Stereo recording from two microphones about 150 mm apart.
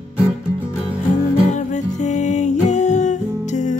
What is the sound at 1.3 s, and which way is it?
Music, 55° left (ahead or behind).